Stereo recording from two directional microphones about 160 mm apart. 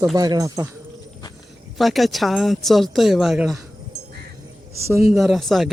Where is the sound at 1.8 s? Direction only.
Centre (ahead or behind).